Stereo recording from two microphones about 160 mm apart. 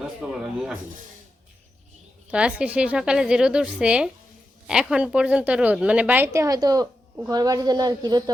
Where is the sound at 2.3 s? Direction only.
5° right (ahead or behind).